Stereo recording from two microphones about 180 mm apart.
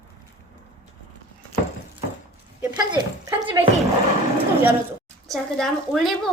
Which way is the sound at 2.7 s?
20° right (ahead or behind).